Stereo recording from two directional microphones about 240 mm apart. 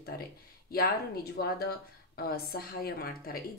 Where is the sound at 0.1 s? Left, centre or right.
Left.